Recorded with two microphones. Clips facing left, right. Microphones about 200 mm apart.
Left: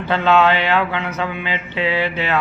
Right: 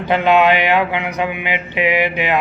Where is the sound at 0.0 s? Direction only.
15° right (ahead or behind).